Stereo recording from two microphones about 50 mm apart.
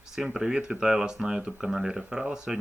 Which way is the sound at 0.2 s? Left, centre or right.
Centre.